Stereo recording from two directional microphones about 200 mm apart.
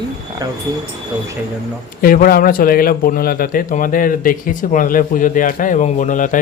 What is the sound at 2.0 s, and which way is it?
A man's voice, 45° left (ahead or behind).